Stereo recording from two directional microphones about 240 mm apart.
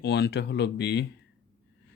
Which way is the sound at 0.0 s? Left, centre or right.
Left.